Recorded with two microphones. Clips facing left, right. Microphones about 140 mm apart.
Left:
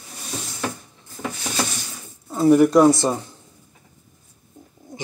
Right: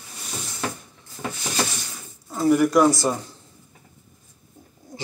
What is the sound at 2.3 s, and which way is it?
Speech, 25° left (ahead or behind).